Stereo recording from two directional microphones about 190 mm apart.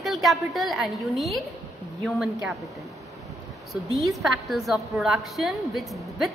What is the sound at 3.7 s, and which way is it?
A woman's voice, centre (ahead or behind).